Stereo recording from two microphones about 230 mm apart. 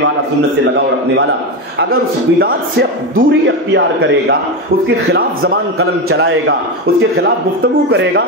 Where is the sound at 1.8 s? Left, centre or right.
Right.